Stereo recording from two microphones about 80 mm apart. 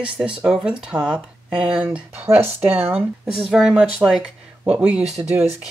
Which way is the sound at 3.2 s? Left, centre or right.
Centre.